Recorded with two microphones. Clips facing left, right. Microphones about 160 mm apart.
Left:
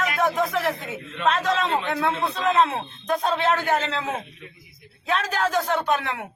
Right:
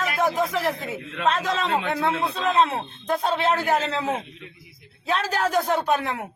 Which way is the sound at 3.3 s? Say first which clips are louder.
Right 1 dB; centre (ahead or behind).